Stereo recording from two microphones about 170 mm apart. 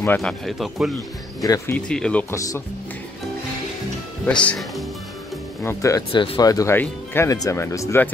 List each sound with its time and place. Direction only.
0.0 s speech: 10° left (ahead or behind)
1.4 s speech: 20° left (ahead or behind)
1.8 s speech: 5° left (ahead or behind)
2.3 s speech: 20° left (ahead or behind)
4.3 s speech: 5° left (ahead or behind)
5.6 s speech: 15° left (ahead or behind)